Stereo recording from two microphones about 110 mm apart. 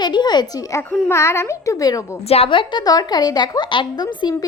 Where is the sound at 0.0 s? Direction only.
40° left (ahead or behind).